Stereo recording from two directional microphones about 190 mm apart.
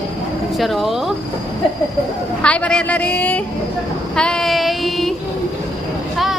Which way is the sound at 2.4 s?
5° left (ahead or behind).